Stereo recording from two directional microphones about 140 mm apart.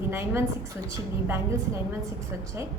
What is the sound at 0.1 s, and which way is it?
Speech, 15° right (ahead or behind).